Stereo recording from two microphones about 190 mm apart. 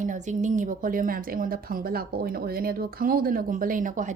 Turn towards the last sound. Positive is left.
turn(degrees=-40)  # may be behind; listen again after turning